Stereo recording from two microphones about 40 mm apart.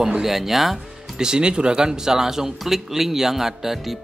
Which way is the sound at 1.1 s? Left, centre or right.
Centre.